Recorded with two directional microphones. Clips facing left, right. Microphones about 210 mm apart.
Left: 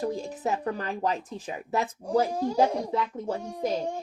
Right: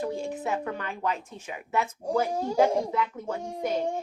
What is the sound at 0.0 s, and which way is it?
A woman's voice, 40° left (ahead or behind).